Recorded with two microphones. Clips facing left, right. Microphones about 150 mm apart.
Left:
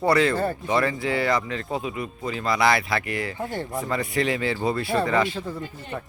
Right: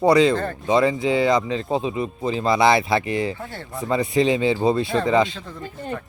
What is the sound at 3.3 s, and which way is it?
Speech, 20° left (ahead or behind).